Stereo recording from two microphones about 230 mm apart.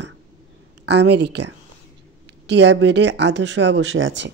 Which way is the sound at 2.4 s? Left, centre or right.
Right.